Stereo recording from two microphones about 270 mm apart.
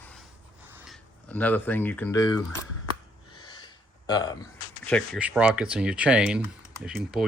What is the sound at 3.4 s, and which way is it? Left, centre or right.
Snort, centre.